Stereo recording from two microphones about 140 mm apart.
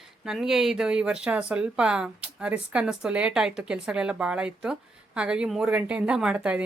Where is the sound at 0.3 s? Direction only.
Centre (ahead or behind).